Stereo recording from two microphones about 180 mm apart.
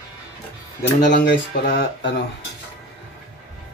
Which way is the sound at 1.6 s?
60° left (ahead or behind).